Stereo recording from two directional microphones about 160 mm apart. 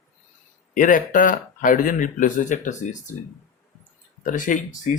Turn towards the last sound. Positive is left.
turn(degrees=55)  # may be behind; listen again after turning